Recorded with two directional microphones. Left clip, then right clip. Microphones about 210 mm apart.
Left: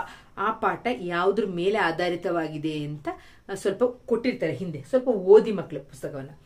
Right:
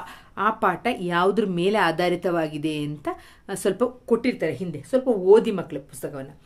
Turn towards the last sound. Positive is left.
turn(degrees=-55)  # may be behind; listen again after turning